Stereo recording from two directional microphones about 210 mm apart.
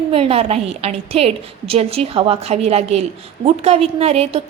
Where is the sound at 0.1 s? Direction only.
25° right (ahead or behind).